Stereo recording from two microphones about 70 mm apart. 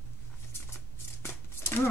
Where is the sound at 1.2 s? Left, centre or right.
Left.